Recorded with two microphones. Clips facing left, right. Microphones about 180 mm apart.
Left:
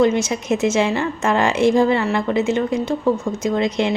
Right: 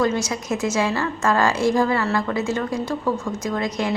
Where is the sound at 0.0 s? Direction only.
25° left (ahead or behind).